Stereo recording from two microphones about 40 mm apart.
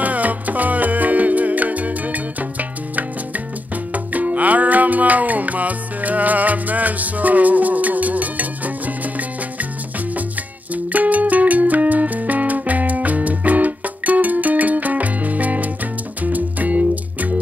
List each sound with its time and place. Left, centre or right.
0.0 s music: right
3.9 s music: right
10.7 s music: right